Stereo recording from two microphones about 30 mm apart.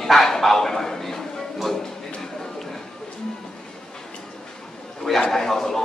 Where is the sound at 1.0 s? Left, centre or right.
Centre.